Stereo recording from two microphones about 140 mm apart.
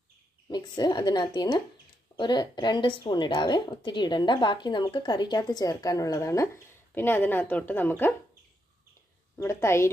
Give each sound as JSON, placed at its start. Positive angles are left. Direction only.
{"t": 0.5, "sound": "a woman's voice", "side_deg": 30}
{"t": 9.4, "sound": "a woman's voice", "side_deg": 20}